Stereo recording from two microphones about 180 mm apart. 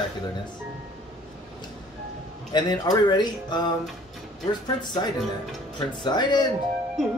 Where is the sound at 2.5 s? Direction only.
25° left (ahead or behind).